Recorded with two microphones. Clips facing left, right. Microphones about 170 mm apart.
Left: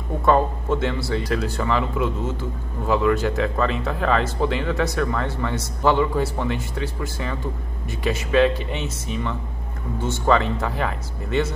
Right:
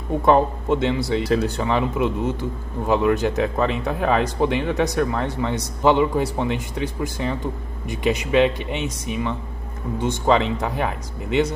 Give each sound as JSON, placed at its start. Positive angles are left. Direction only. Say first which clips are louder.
{"t": 0.2, "sound": "speech", "louder": "right 1 dB", "side_deg": -20}